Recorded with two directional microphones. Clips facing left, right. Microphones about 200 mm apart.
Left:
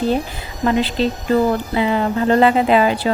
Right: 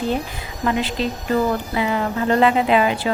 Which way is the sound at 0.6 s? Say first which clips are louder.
Left 4 dB; 35° left (ahead or behind).